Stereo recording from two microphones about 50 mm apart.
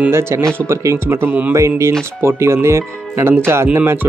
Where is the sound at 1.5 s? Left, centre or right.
Right.